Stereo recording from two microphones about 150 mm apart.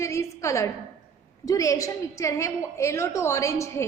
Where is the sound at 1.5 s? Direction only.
20° left (ahead or behind).